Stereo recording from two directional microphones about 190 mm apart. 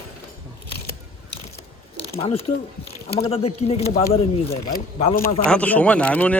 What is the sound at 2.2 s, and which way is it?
Speech, 30° left (ahead or behind).